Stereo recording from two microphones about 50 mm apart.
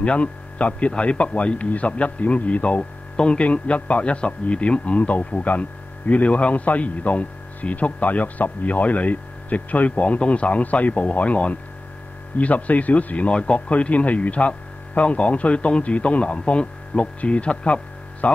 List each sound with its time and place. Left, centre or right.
0.0 s speech: left